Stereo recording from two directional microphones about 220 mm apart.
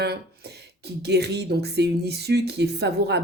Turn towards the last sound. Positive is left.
turn(degrees=-50)  # may be behind; listen again after turning